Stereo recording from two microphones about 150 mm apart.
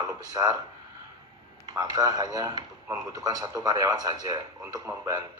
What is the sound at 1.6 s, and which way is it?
Speech, 25° right (ahead or behind).